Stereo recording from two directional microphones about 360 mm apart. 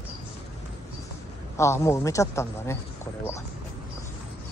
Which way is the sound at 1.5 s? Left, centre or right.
Centre.